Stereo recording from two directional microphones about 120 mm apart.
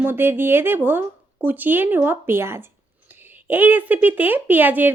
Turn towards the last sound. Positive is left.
turn(degrees=-15)  # may be behind; listen again after turning